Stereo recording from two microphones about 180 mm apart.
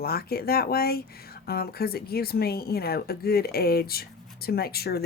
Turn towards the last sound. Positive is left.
turn(degrees=60)  # may be behind; listen again after turning